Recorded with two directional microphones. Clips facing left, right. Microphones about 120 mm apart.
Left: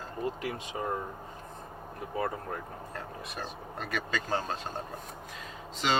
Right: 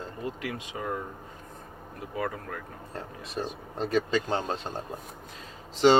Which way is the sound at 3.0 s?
30° right (ahead or behind).